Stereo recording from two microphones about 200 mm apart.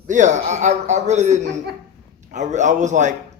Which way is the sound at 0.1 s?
35° right (ahead or behind).